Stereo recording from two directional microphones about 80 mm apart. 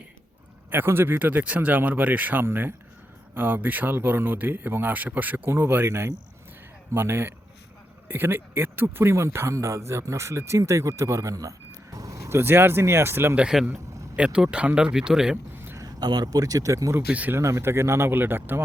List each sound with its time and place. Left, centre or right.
0.7 s speech: right
11.9 s vehicle: right
12.4 s speech: right
13.3 s speech: centre
15.5 s a sound: right
15.8 s speech: right
17.1 s speech: centre
17.3 s speech: right